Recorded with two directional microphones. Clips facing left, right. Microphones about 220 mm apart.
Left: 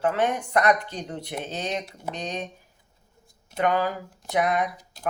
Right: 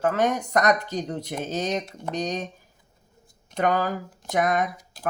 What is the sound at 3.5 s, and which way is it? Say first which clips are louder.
Speech: even; 40° right (ahead or behind).